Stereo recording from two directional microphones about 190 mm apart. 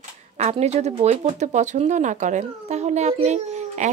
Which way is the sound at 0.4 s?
35° right (ahead or behind).